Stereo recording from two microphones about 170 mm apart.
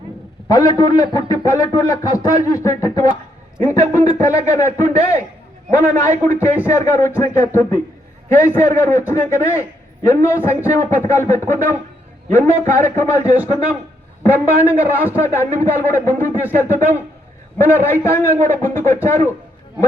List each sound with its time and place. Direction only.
0.4 s a man's voice: 20° left (ahead or behind)
14.3 s a man's voice: 10° right (ahead or behind)
14.9 s a man's voice: 15° left (ahead or behind)